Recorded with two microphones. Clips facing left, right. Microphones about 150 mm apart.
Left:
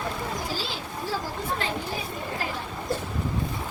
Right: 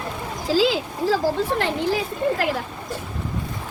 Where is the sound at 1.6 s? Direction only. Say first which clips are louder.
Right 8 dB; 70° right (ahead or behind); by 2.5 s 85° right.